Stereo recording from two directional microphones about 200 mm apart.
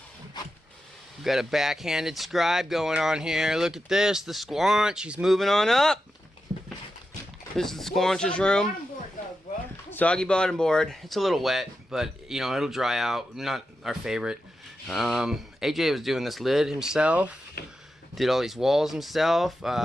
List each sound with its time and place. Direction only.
0.4 s a sound: 20° left (ahead or behind)
1.2 s speech: centre (ahead or behind)
7.5 s speech: centre (ahead or behind)
9.9 s speech: 5° left (ahead or behind)
17.6 s speech: 55° left (ahead or behind)
18.1 s speech: centre (ahead or behind)